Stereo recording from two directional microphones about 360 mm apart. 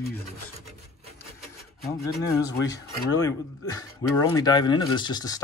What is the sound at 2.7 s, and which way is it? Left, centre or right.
Speech, centre.